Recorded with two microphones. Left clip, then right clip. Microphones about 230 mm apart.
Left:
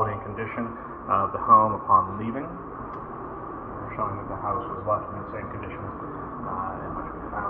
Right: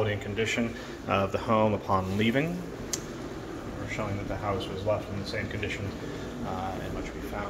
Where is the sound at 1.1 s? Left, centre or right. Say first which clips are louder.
Left 8 dB; right.